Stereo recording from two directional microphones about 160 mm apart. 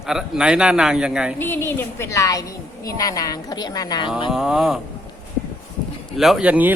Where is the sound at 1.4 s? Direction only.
15° left (ahead or behind).